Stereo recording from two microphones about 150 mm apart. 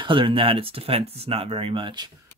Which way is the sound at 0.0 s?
35° right (ahead or behind).